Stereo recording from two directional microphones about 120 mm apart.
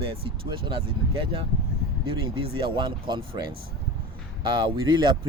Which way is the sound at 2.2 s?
45° right (ahead or behind).